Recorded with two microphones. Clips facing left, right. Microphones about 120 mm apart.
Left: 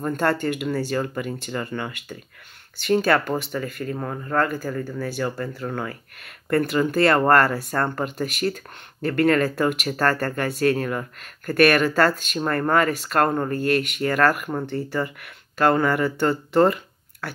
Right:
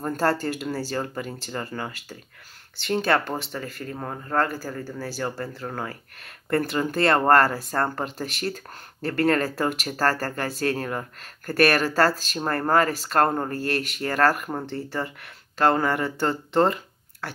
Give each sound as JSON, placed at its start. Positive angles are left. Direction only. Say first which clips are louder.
{"t": 0.0, "sound": "speech", "louder": "left 1 dB", "side_deg": -35}